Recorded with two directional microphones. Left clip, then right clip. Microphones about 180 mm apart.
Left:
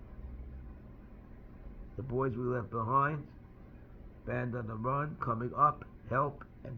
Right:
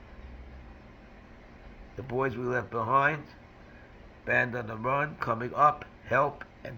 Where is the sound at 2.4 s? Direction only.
20° right (ahead or behind).